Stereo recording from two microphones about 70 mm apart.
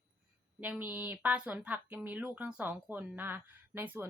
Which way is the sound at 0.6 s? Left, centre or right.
Right.